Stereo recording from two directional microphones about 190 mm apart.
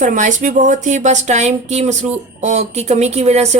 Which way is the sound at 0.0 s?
40° right (ahead or behind).